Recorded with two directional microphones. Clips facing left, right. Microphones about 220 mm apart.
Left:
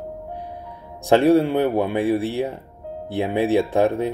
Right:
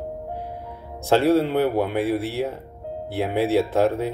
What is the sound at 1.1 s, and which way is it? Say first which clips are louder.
Speech: left 3 dB; 15° left (ahead or behind).